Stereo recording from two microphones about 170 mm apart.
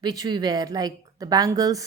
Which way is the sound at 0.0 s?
25° right (ahead or behind).